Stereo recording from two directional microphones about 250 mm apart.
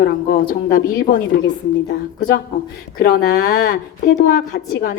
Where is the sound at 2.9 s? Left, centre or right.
Left.